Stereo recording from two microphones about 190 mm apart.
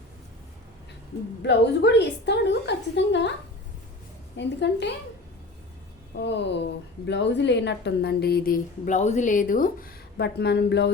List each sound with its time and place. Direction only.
1.4 s a woman's voice: 65° left (ahead or behind)
4.4 s a woman's voice: 65° left (ahead or behind)
6.1 s a woman's voice: 65° left (ahead or behind)